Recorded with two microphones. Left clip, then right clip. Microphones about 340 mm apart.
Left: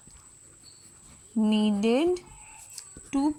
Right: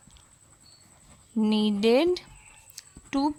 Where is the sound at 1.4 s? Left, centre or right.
Centre.